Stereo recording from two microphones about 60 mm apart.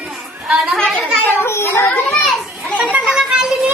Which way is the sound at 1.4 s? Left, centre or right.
Left.